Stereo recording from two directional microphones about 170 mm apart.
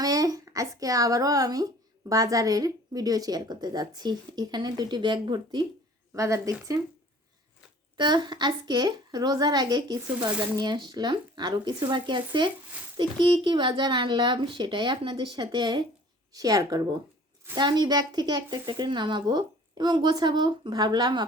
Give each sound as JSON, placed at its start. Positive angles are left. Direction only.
{"t": 0.0, "sound": "speech", "side_deg": -20}
{"t": 7.9, "sound": "speech", "side_deg": -25}
{"t": 10.2, "sound": "speech", "side_deg": -10}